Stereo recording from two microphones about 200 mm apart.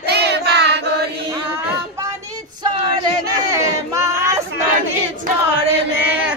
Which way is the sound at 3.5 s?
15° right (ahead or behind).